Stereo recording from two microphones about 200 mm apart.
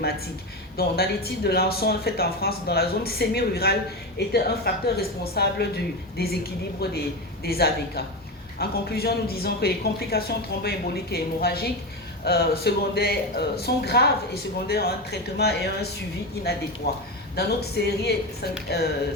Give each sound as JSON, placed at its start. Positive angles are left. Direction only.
{"t": 0.8, "sound": "a woman's voice", "side_deg": 50}